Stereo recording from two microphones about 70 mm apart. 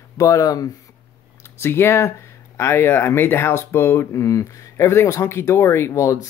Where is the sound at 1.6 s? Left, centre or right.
Left.